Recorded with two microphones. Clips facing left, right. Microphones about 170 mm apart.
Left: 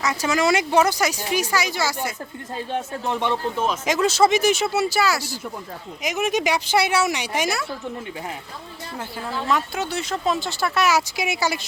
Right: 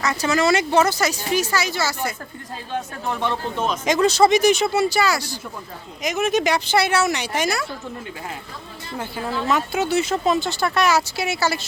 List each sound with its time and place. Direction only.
0.0 s speech: 10° left (ahead or behind)
3.6 s speech: 5° left (ahead or behind)
9.0 s speech: centre (ahead or behind); by 11.6 s 15° left (ahead or behind)